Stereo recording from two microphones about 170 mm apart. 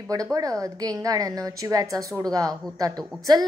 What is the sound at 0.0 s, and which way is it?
A woman's voice, 20° right (ahead or behind).